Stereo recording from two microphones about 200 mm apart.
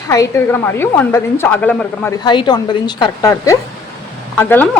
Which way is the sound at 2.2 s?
20° left (ahead or behind).